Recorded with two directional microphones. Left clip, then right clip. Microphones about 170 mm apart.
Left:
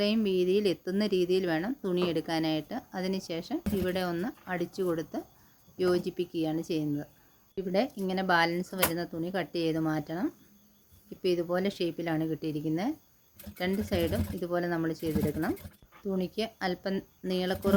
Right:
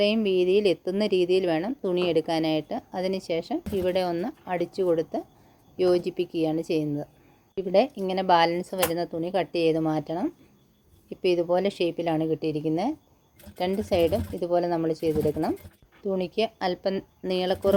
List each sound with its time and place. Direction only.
0.0 s speech: centre (ahead or behind)